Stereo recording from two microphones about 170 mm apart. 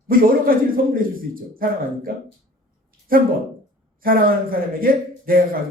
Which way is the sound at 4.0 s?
60° right (ahead or behind).